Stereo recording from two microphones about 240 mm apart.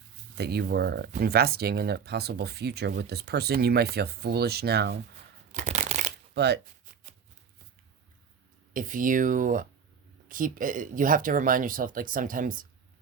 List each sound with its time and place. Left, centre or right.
0.3 s speech: right
5.5 s shuffling cards: right
6.3 s speech: right
8.7 s speech: right